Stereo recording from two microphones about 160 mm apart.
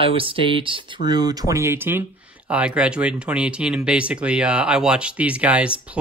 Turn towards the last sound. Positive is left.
turn(degrees=-10)  # may be behind; listen again after turning